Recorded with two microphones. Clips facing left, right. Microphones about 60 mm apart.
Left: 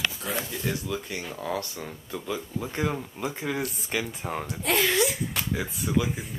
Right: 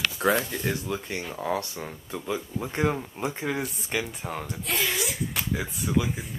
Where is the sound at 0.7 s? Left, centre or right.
Right.